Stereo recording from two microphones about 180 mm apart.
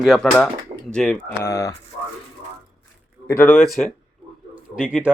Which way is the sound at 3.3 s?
10° left (ahead or behind).